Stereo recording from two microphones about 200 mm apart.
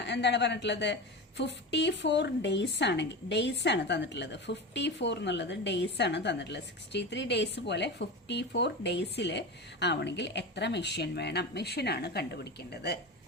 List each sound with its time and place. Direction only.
0.0 s a woman's voice: 60° left (ahead or behind)